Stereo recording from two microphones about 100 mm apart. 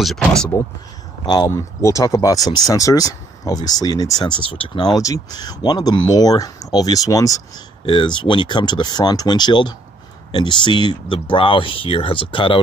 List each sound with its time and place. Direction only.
0.0 s speech: 5° left (ahead or behind)
1.2 s speech: 45° left (ahead or behind)
1.5 s speech: 30° left (ahead or behind)
4.5 s speech: 55° left (ahead or behind); by 7.6 s 35° left (ahead or behind)
7.8 s speech: 55° left (ahead or behind)